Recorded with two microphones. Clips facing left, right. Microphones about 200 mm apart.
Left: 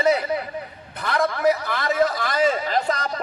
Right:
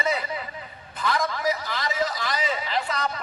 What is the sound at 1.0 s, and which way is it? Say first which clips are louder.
A man's voice: left 4 dB; 65° left (ahead or behind).